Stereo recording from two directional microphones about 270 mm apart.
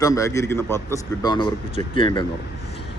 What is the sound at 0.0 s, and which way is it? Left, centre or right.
A man's voice, centre.